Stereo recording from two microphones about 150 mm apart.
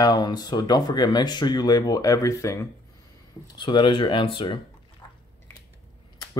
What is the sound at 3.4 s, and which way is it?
Speech, 30° left (ahead or behind).